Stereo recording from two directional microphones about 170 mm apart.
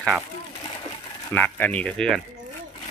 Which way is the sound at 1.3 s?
10° left (ahead or behind).